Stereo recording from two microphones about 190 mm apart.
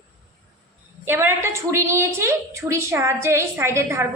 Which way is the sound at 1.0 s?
10° right (ahead or behind).